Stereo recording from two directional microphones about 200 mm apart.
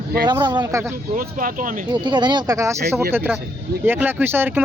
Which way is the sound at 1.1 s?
45° right (ahead or behind).